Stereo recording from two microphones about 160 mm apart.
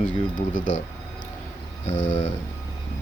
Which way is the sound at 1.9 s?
50° left (ahead or behind).